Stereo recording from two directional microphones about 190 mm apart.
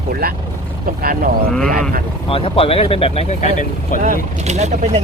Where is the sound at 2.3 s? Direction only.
30° left (ahead or behind).